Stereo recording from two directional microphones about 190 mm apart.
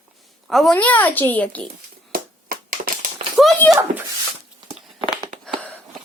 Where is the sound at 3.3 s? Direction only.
Centre (ahead or behind).